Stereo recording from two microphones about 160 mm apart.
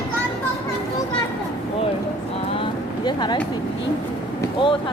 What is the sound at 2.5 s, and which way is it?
Vehicle, 30° left (ahead or behind).